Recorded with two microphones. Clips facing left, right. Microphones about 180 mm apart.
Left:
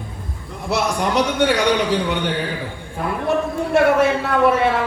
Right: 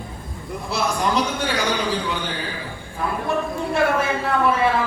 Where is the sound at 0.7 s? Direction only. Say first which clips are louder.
Left 3 dB; 70° left (ahead or behind).